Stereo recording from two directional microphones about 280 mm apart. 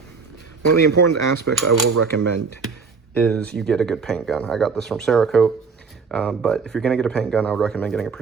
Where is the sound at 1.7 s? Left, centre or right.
Right.